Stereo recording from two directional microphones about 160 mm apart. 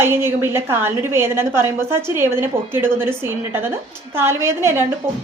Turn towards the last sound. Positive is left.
turn(degrees=-15)  # may be behind; listen again after turning